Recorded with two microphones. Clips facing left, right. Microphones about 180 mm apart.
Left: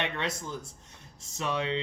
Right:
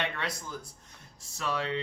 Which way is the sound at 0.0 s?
20° left (ahead or behind).